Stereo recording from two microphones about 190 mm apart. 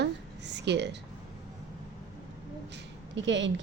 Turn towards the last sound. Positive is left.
turn(degrees=-70)  # may be behind; listen again after turning